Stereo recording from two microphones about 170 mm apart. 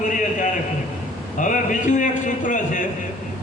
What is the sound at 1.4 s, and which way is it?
A man's voice, 50° left (ahead or behind).